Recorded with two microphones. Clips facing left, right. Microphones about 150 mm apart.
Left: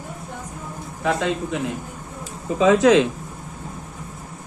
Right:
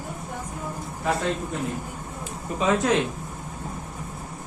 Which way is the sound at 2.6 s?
90° left.